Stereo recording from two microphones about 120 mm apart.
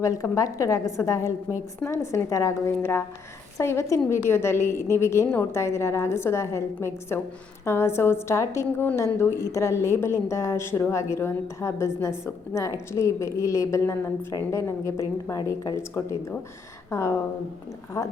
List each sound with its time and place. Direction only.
0.0 s a woman's voice: 25° left (ahead or behind)